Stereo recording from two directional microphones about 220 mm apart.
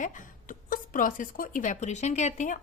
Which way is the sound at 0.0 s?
40° left (ahead or behind).